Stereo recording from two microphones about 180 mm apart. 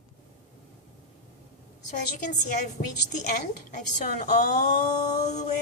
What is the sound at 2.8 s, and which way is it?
Speech, 35° left (ahead or behind).